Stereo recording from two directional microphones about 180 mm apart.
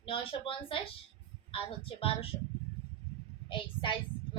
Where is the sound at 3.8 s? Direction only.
30° left (ahead or behind).